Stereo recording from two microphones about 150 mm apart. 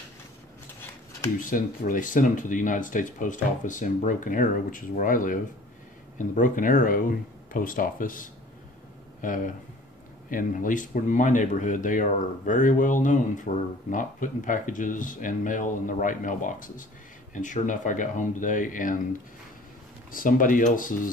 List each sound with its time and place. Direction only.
1.4 s speech: 65° left (ahead or behind)
20.1 s speech: 65° left (ahead or behind)